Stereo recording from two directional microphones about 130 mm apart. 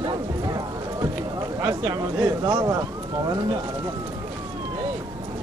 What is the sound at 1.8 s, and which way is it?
Speech, 35° right (ahead or behind).